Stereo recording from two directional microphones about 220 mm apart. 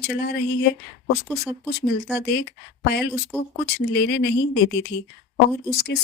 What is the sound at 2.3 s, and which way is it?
Speech, 50° left (ahead or behind).